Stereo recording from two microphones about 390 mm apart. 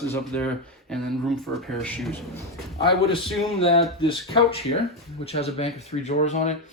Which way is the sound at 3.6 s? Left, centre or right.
Centre.